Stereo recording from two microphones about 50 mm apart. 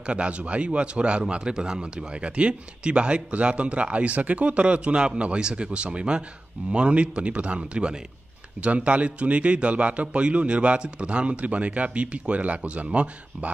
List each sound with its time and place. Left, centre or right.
0.0 s speech: right